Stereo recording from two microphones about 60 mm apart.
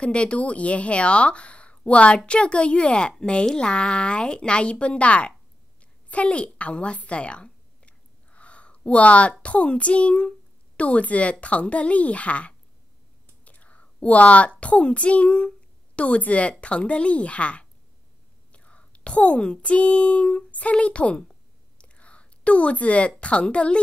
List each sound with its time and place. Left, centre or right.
0.0 s speech: centre
5.8 s a sound: left
10.8 s speech: left
13.4 s whispering: left
14.6 s a child's voice: centre